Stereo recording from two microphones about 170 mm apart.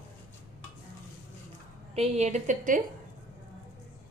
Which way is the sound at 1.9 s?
40° right (ahead or behind).